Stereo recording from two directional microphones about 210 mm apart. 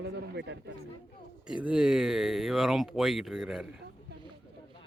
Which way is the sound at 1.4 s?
5° right (ahead or behind).